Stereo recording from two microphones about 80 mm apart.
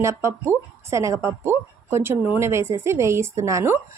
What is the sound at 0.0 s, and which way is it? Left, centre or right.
Speech, right.